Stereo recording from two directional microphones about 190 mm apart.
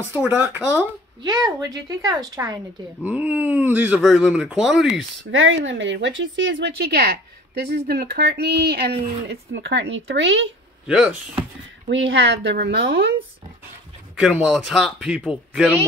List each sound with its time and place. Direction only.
0.1 s speech: 10° right (ahead or behind)
1.2 s a woman's voice: 20° right (ahead or behind)
3.0 s speech: 10° right (ahead or behind)
5.3 s a woman's voice: 90° right
10.9 s speech: 5° right (ahead or behind)
11.9 s a woman's voice: 75° right (ahead or behind)
14.1 s speech: 5° right (ahead or behind)